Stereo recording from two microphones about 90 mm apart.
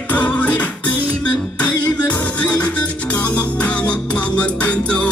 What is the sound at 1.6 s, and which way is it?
Music, 15° left (ahead or behind).